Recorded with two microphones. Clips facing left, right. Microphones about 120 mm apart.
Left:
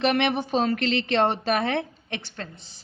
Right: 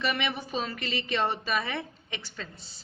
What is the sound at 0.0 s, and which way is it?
A woman's voice, 65° left (ahead or behind).